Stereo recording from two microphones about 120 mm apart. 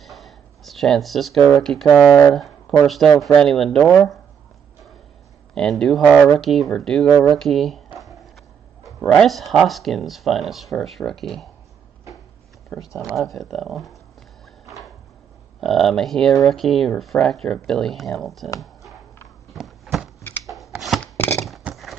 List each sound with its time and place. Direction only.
0.0 s speech: centre (ahead or behind)
2.3 s a sound: centre (ahead or behind)
2.8 s speech: centre (ahead or behind)
5.5 s speech: 5° left (ahead or behind)
13.3 s speech: centre (ahead or behind)
15.6 s speech: centre (ahead or behind)
19.5 s a sound: centre (ahead or behind)
20.4 s shuffling cards: centre (ahead or behind)
21.0 s a sound: 15° left (ahead or behind)
21.5 s horse: centre (ahead or behind)